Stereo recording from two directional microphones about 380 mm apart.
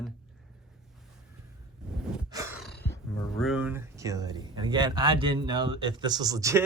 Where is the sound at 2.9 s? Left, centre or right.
Centre.